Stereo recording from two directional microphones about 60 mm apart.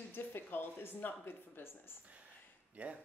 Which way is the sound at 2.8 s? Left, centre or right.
Right.